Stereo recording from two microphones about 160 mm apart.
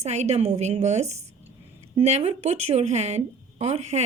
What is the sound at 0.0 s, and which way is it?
Speech, 45° right (ahead or behind).